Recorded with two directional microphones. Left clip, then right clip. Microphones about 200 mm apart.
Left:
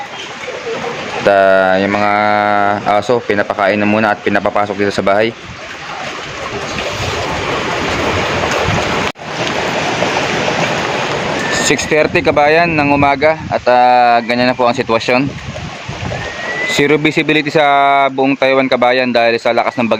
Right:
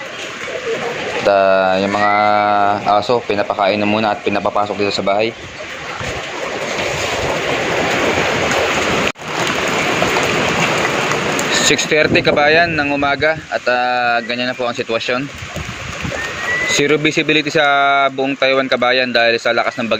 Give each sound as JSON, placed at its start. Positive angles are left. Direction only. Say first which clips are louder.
{"t": 1.3, "sound": "speech", "louder": "left 3 dB", "side_deg": 30}
{"t": 11.5, "sound": "speech", "louder": "left 1 dB", "side_deg": 15}
{"t": 16.7, "sound": "speech", "louder": "left 4 dB", "side_deg": 15}